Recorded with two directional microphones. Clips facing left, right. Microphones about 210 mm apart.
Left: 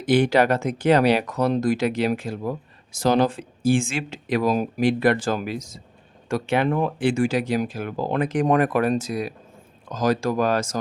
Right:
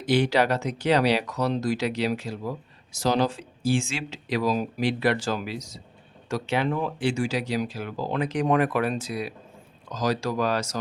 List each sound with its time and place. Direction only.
0.0 s speech: 50° left (ahead or behind)